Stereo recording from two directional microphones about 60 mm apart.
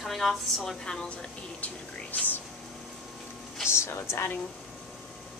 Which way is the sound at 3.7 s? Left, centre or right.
Left.